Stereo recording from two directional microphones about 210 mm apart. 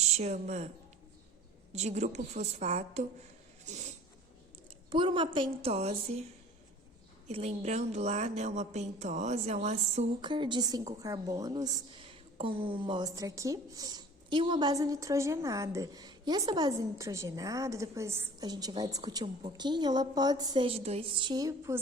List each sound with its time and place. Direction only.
0.0 s speech: 30° right (ahead or behind)
1.7 s a woman's voice: 30° right (ahead or behind)
3.7 s a sound: 35° right (ahead or behind)
4.9 s speech: 25° right (ahead or behind)
7.3 s a woman's voice: 30° right (ahead or behind)